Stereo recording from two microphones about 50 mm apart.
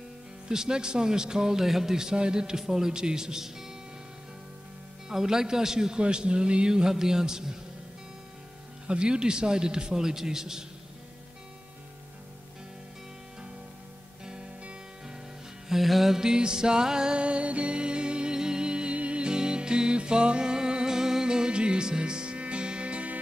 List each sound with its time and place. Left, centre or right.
0.5 s a man's voice: centre
5.0 s a man's voice: centre
8.8 s a man's voice: centre
14.6 s music: right
15.7 s music: centre; by 23.1 s right